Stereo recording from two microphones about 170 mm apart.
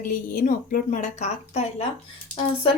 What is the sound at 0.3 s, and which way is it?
Speech, 50° left (ahead or behind).